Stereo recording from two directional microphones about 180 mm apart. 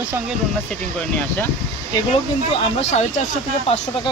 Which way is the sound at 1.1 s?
10° left (ahead or behind).